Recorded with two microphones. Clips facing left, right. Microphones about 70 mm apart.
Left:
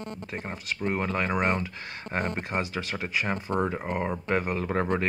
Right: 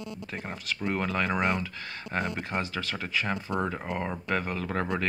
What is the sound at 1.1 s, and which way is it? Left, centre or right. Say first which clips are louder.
Speech: even; left.